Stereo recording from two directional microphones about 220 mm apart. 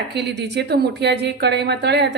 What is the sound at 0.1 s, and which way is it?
A woman's voice, 50° right (ahead or behind).